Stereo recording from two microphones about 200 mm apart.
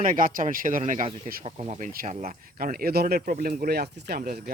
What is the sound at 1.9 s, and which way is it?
Speech, 40° right (ahead or behind).